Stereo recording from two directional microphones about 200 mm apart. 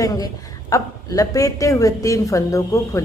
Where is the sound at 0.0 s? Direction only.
15° left (ahead or behind).